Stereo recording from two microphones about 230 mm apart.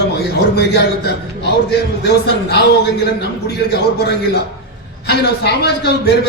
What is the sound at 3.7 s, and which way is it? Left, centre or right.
A man's voice, left.